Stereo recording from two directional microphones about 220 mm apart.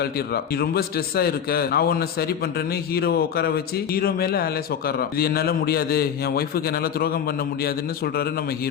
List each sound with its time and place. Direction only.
0.0 s a man's voice: 45° left (ahead or behind)